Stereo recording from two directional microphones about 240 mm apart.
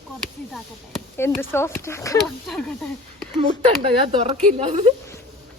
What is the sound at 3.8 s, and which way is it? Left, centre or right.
Speech, right.